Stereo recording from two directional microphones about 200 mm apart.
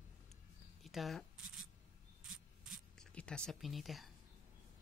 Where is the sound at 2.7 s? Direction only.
5° left (ahead or behind).